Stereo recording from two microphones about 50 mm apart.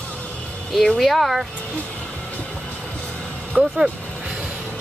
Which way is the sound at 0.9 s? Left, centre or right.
Centre.